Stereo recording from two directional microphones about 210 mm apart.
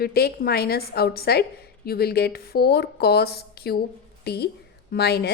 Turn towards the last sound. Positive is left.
turn(degrees=50)  # may be behind; listen again after turning